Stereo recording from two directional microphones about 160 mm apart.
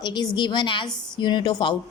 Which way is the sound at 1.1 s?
30° left (ahead or behind).